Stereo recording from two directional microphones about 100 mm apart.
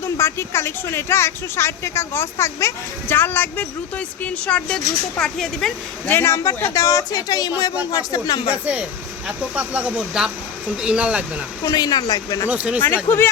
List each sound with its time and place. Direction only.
0.0 s speech: 25° left (ahead or behind); by 5.7 s 5° left (ahead or behind)
6.1 s speech: 25° left (ahead or behind); by 8.4 s 40° left (ahead or behind)
8.6 s speech: 10° right (ahead or behind)
11.6 s speech: 40° left (ahead or behind)
12.5 s speech: 15° right (ahead or behind)
13.1 s speech: 25° left (ahead or behind)